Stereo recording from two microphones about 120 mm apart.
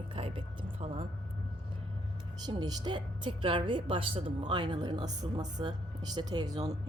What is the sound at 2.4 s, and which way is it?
A woman's voice, 35° right (ahead or behind).